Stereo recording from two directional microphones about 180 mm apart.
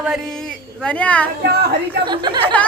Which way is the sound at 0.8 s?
5° left (ahead or behind).